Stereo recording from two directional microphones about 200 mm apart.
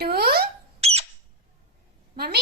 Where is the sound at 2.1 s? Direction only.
50° right (ahead or behind).